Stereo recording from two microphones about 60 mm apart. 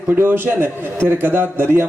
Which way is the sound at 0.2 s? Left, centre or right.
Right.